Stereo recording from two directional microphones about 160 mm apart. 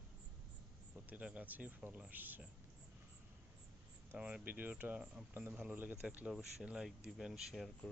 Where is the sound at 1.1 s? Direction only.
10° right (ahead or behind).